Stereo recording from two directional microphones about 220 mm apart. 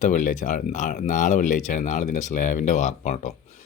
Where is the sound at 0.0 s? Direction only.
35° left (ahead or behind).